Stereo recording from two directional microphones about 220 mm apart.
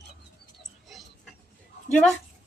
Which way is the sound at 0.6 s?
Centre (ahead or behind).